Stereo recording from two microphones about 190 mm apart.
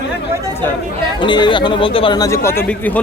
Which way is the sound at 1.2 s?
25° left (ahead or behind).